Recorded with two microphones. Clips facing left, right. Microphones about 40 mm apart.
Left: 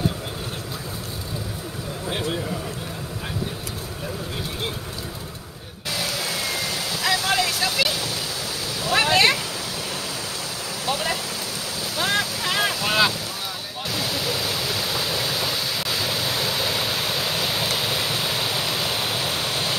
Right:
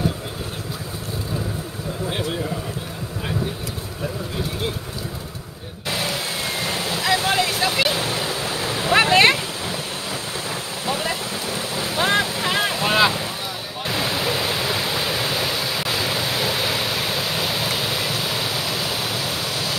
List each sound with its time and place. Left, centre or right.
7.2 s vehicle: centre
8.8 s a sound: right
10.9 s vehicle: right
12.0 s boat: right
13.9 s pink noise: right; by 17.6 s centre